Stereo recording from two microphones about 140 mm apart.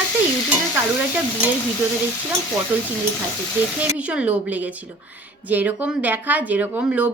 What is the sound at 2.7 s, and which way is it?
Speech, 15° right (ahead or behind).